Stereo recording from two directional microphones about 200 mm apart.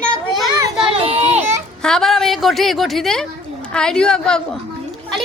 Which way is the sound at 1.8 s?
Centre (ahead or behind).